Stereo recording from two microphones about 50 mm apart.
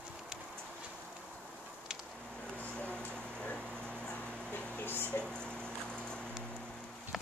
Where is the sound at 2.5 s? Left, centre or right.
Left.